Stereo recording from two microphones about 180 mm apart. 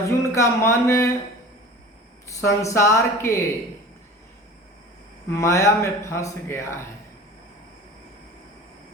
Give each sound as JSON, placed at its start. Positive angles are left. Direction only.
{"t": 0.3, "sound": "speech", "side_deg": 15}
{"t": 2.2, "sound": "speech", "side_deg": 15}
{"t": 5.3, "sound": "speech", "side_deg": 15}